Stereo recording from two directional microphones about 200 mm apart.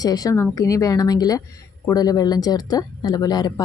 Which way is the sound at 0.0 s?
20° left (ahead or behind).